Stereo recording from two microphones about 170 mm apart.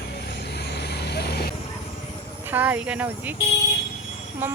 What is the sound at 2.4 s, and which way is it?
Speech, 10° right (ahead or behind).